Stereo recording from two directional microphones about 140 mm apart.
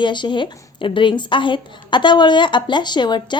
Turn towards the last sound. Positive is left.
turn(degrees=30)  # may be behind; listen again after turning